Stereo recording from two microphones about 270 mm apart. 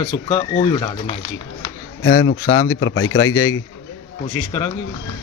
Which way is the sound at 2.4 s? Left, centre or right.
Centre.